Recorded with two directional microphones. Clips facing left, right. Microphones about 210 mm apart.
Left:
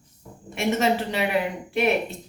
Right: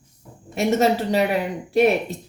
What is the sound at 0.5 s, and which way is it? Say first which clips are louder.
A woman's voice: right 4 dB; 40° right (ahead or behind).